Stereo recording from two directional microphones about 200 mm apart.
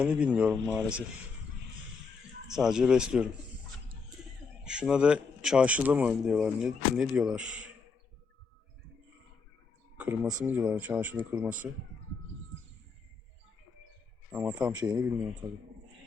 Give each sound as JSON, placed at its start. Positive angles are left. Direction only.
{"t": 0.0, "sound": "speech", "side_deg": -5}
{"t": 2.5, "sound": "speech", "side_deg": -5}
{"t": 4.6, "sound": "speech", "side_deg": -5}
{"t": 10.0, "sound": "speech", "side_deg": -10}
{"t": 14.3, "sound": "speech", "side_deg": -10}